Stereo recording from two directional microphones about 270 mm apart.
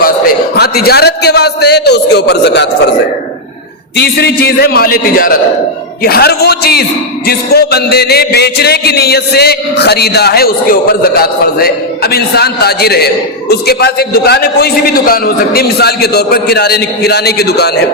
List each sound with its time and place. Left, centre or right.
0.5 s a man's voice: left
3.9 s a man's voice: left